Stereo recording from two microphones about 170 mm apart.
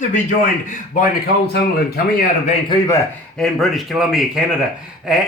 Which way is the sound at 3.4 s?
Centre (ahead or behind).